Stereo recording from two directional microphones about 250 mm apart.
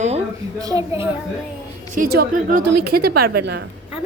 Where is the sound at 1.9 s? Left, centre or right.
Right.